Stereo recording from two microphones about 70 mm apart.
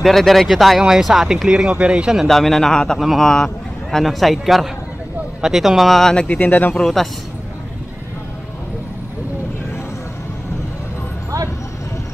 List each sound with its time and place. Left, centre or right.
0.0 s speech: centre
2.2 s speech: centre
6.2 s speech: left
6.8 s speech: centre